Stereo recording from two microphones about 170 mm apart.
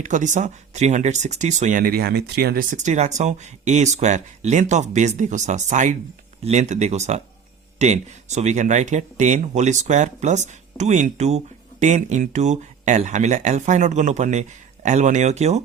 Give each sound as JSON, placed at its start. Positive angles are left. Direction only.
{"t": 0.0, "sound": "speech", "side_deg": -45}